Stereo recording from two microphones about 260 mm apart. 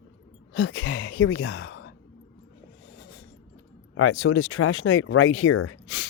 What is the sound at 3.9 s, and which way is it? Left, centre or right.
Speech, left.